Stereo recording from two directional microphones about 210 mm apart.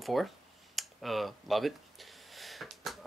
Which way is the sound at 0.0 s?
Centre (ahead or behind).